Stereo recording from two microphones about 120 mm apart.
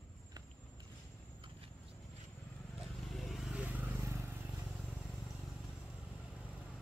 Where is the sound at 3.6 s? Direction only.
15° right (ahead or behind).